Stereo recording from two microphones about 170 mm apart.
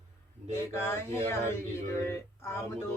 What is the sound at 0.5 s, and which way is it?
Speech, 15° left (ahead or behind).